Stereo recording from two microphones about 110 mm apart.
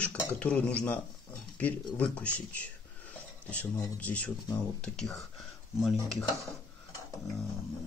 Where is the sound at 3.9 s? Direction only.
10° left (ahead or behind).